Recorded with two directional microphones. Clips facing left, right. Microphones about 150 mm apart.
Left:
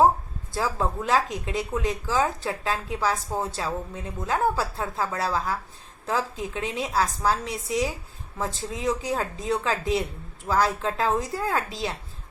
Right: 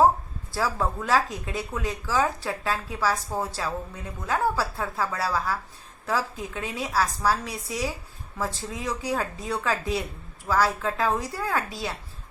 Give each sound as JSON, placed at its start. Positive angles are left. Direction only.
{"t": 0.5, "sound": "speech", "side_deg": 20}